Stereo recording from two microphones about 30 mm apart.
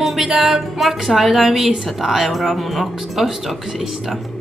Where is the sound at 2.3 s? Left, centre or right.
Centre.